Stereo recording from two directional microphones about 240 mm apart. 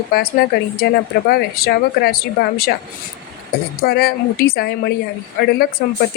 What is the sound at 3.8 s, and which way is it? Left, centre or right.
A woman's voice, left.